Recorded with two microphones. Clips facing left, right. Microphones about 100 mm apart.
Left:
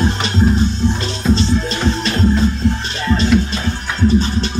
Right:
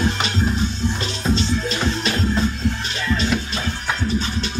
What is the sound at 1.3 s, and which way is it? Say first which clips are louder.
Music: left 4 dB; 35° left (ahead or behind).